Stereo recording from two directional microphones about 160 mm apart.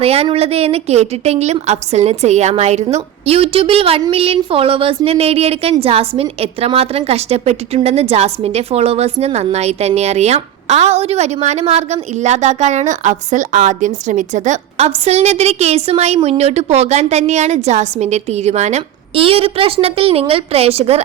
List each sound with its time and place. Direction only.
0.0 s a woman's voice: 40° right (ahead or behind)